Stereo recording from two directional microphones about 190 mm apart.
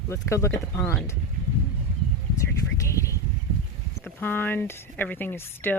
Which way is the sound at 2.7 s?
15° left (ahead or behind).